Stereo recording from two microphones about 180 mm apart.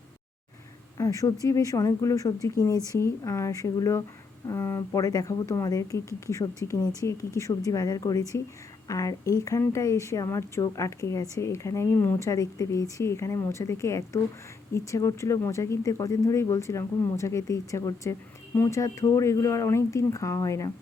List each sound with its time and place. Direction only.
0.9 s a woman's voice: 20° left (ahead or behind)